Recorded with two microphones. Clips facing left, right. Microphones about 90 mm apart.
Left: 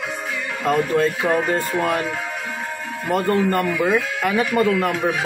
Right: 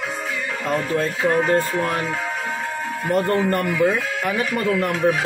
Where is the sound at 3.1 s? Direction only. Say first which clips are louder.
Left 1 dB; 5° left (ahead or behind).